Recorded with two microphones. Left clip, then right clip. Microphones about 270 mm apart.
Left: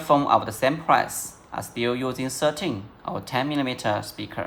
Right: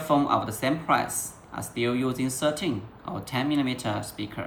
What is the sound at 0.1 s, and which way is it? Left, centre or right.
Speech, left.